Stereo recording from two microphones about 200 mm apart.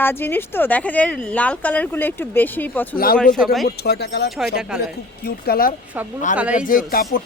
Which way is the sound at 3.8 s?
55° left (ahead or behind).